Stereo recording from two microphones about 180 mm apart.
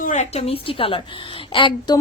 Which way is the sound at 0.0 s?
40° left (ahead or behind).